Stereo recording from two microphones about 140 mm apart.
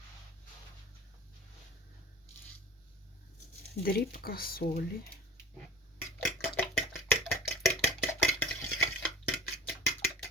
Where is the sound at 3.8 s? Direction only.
80° left.